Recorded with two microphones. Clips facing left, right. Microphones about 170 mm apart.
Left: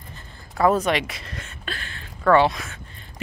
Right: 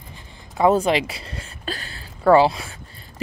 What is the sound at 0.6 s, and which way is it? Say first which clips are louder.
Speech: right 2 dB; 25° right (ahead or behind).